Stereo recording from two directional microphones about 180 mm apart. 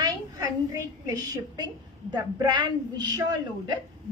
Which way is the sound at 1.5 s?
25° right (ahead or behind).